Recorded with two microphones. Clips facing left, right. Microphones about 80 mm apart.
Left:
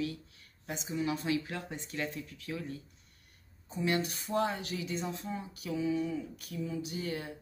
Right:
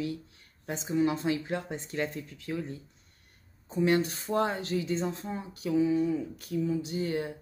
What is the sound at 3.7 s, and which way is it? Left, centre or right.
Speech, right.